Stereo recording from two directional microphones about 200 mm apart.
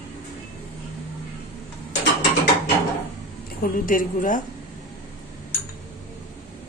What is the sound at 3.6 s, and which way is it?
Speech, 45° left (ahead or behind).